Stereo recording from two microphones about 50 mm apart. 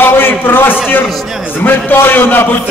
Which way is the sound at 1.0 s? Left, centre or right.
Centre.